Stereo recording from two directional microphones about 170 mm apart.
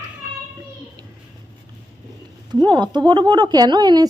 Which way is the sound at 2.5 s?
25° right (ahead or behind).